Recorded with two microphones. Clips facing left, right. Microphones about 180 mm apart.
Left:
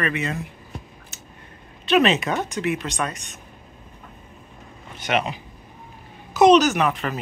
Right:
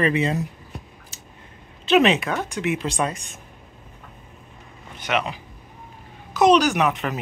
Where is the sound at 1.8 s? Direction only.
20° right (ahead or behind).